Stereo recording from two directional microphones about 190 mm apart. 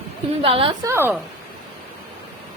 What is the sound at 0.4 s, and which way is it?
Speech, 30° right (ahead or behind).